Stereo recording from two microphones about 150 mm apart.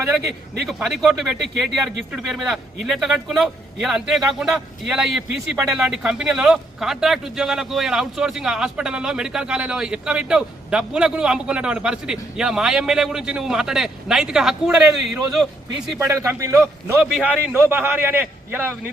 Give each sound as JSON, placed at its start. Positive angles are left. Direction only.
{"t": 0.7, "sound": "a man's voice", "side_deg": 0}
{"t": 16.0, "sound": "speech", "side_deg": -20}
{"t": 16.6, "sound": "a man's voice", "side_deg": -5}